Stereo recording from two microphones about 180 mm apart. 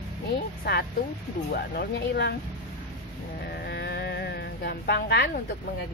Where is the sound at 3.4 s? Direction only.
60° left (ahead or behind).